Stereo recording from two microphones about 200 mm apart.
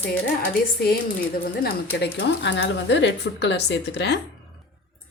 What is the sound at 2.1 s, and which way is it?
Speech, 60° left (ahead or behind).